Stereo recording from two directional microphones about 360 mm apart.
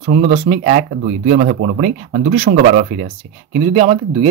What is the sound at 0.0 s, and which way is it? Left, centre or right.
Speech, right.